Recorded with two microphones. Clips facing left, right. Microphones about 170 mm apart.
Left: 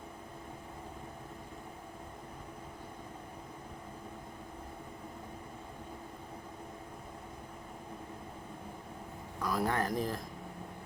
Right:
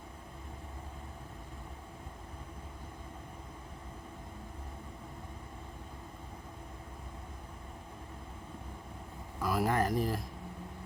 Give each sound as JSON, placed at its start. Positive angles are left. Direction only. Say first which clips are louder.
{"t": 9.4, "sound": "speech", "louder": "right 2 dB", "side_deg": -5}